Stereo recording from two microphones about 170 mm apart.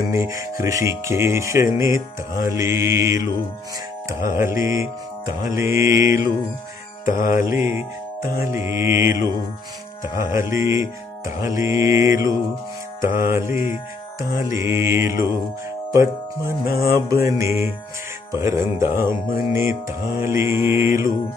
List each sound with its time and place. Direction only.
0.1 s music: 15° right (ahead or behind)
5.9 s music: 55° left (ahead or behind)
7.4 s music: 20° right (ahead or behind)
15.9 s speech: 15° right (ahead or behind)
16.8 s music: 65° left (ahead or behind)
17.3 s music: 15° right (ahead or behind)